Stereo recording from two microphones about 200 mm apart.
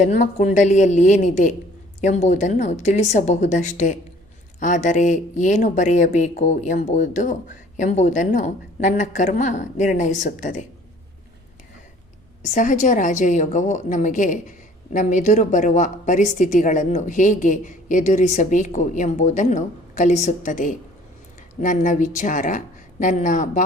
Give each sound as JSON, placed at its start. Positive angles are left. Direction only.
{"t": 0.0, "sound": "speech", "side_deg": 40}
{"t": 12.5, "sound": "speech", "side_deg": 40}